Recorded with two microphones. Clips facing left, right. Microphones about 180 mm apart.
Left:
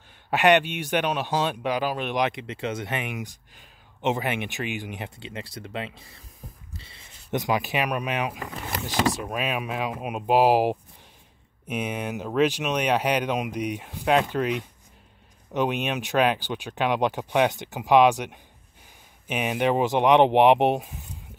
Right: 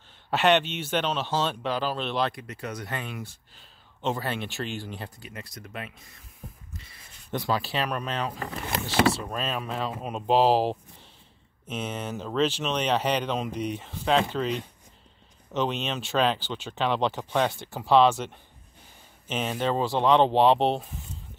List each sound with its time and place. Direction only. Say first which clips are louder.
0.3 s speech: left 3 dB; 15° left (ahead or behind)
15.5 s speech: left 3 dB; 15° left (ahead or behind)